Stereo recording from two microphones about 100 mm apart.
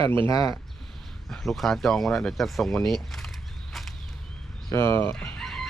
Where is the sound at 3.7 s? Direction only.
Centre (ahead or behind).